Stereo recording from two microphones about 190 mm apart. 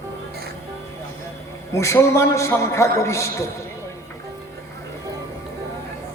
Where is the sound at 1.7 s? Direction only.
15° left (ahead or behind).